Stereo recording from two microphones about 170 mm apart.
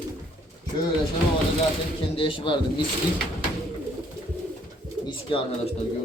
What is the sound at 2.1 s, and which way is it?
Speech, 30° left (ahead or behind).